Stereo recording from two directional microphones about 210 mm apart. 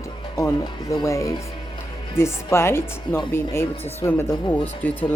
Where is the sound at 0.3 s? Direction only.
15° left (ahead or behind).